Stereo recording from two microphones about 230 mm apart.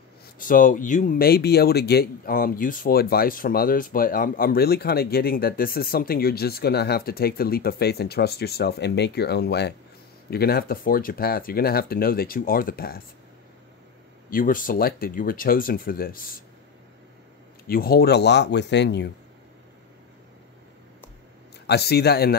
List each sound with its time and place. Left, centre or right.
0.4 s speech: left
14.3 s speech: left
17.6 s speech: left
21.6 s speech: left